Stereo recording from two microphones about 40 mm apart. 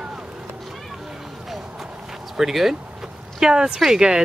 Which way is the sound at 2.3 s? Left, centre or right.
Centre.